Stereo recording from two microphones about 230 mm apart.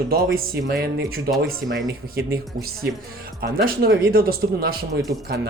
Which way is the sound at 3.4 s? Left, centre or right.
Right.